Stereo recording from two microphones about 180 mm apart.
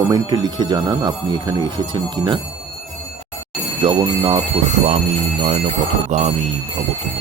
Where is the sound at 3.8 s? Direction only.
30° right (ahead or behind).